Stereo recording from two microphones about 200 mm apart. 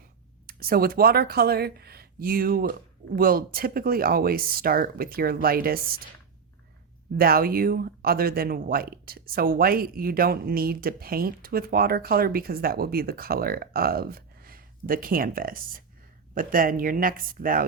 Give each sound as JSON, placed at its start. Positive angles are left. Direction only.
{"t": 0.4, "sound": "speech", "side_deg": -50}
{"t": 7.2, "sound": "speech", "side_deg": -50}